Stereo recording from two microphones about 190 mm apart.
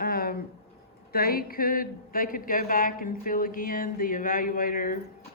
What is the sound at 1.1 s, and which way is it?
Speech, 50° left (ahead or behind).